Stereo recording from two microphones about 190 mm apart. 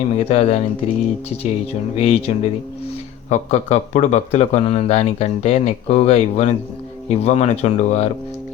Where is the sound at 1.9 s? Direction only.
30° left (ahead or behind).